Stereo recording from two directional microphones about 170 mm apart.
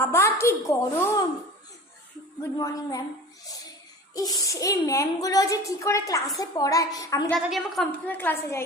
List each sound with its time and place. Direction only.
0.0 s a sound: 15° left (ahead or behind)
0.3 s a woman's voice: 15° left (ahead or behind)
2.4 s a woman's voice: 20° left (ahead or behind)
3.4 s a sound: 20° left (ahead or behind)
4.1 s a woman's voice: 20° left (ahead or behind)
7.4 s a woman's voice: centre (ahead or behind)